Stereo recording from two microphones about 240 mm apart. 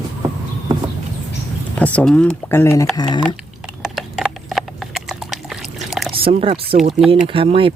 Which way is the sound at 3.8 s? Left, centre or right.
Centre.